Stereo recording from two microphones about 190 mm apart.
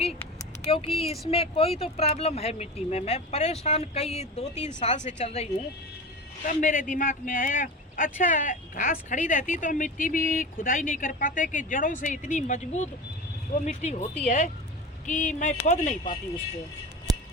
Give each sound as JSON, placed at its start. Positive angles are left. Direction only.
{"t": 0.6, "sound": "speech", "side_deg": 30}